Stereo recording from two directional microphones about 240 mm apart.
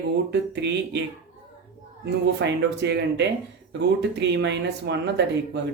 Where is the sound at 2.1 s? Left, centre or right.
Right.